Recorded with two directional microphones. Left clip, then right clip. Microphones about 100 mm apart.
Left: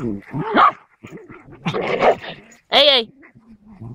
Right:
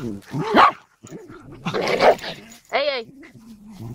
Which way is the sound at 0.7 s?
10° left (ahead or behind).